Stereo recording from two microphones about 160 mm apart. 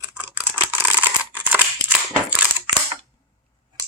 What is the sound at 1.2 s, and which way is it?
Scissors, 10° right (ahead or behind).